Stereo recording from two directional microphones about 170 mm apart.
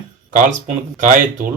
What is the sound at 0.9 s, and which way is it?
Speech, 50° right (ahead or behind).